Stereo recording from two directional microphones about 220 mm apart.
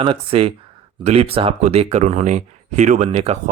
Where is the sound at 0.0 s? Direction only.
25° right (ahead or behind).